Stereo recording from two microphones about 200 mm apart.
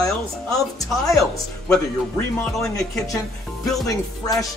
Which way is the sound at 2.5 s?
Centre (ahead or behind).